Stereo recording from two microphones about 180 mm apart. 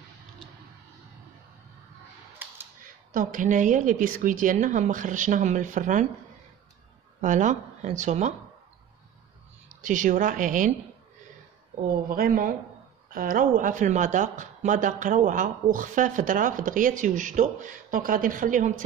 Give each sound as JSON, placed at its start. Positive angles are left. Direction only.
{"t": 2.4, "sound": "typewriter", "side_deg": -10}
{"t": 3.1, "sound": "a woman's voice", "side_deg": -50}
{"t": 7.2, "sound": "a woman's voice", "side_deg": -45}
{"t": 9.7, "sound": "a woman's voice", "side_deg": -45}
{"t": 11.9, "sound": "a woman's voice", "side_deg": -50}